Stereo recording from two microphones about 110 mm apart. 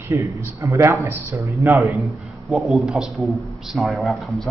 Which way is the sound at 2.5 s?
Centre (ahead or behind).